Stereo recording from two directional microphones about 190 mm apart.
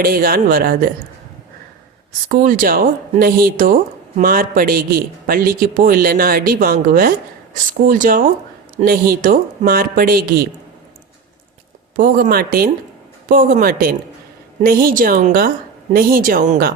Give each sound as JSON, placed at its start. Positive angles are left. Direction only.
{"t": 0.0, "sound": "a man's voice", "side_deg": -50}
{"t": 2.3, "sound": "a man's voice", "side_deg": -45}
{"t": 11.9, "sound": "a man's voice", "side_deg": -45}